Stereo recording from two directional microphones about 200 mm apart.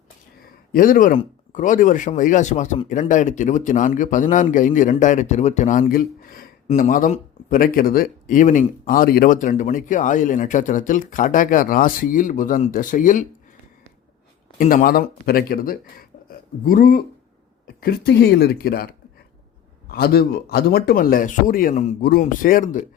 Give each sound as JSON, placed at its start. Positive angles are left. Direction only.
{"t": 0.7, "sound": "speech", "side_deg": 45}
{"t": 14.6, "sound": "speech", "side_deg": 45}
{"t": 19.9, "sound": "speech", "side_deg": 50}